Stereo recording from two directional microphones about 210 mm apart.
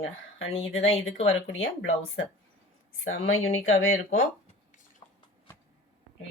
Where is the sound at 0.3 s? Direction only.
70° left (ahead or behind).